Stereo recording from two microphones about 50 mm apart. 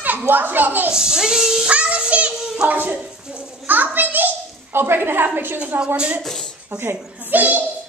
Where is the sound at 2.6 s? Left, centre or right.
Right.